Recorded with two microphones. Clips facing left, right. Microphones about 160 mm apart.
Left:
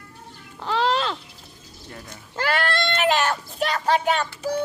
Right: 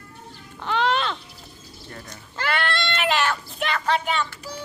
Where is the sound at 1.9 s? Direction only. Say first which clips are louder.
Left 1 dB; 25° left (ahead or behind).